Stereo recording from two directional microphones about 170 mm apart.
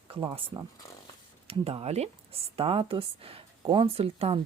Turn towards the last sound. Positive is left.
turn(degrees=-35)  # may be behind; listen again after turning